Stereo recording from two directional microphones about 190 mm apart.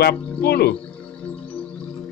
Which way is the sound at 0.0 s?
55° left (ahead or behind).